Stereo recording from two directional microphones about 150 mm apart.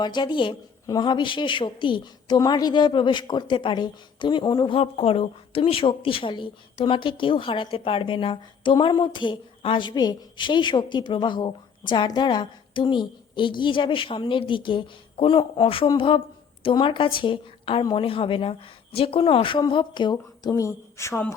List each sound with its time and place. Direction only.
0.0 s a woman's voice: 30° left (ahead or behind)
20.5 s speech: 20° left (ahead or behind)